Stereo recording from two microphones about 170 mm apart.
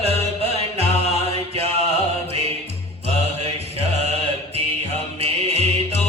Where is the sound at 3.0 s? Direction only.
40° right (ahead or behind).